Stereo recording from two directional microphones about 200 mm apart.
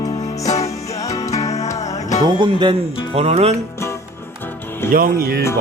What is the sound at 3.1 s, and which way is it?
Speech, 30° right (ahead or behind).